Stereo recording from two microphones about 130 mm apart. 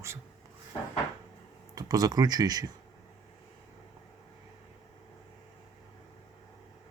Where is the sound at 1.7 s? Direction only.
30° right (ahead or behind).